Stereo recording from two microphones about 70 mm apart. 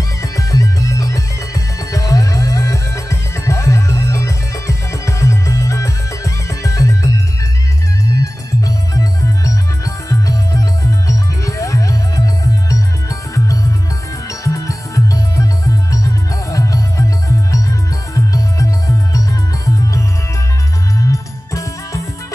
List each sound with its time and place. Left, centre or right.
0.2 s music: left
8.1 s music: left
18.1 s music: left